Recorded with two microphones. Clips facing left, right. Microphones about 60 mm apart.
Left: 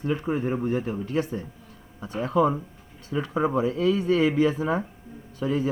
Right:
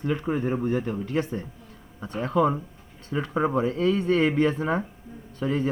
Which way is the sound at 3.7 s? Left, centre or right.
Right.